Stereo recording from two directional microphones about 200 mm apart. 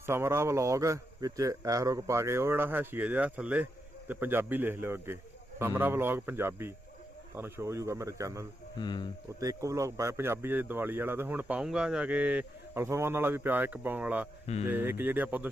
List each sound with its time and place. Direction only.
0.0 s speech: 10° right (ahead or behind)
8.8 s speech: 25° left (ahead or behind)
9.4 s speech: 15° right (ahead or behind)